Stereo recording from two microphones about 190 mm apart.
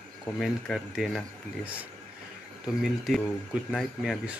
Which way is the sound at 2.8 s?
Centre (ahead or behind).